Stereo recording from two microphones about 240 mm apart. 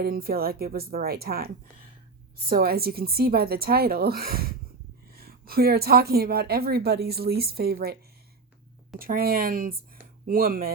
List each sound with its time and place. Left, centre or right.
0.0 s a woman's voice: right
2.5 s a woman's voice: right
9.0 s a woman's voice: right